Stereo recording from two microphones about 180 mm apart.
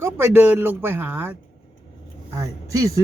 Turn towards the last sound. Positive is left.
turn(degrees=-20)  # may be behind; listen again after turning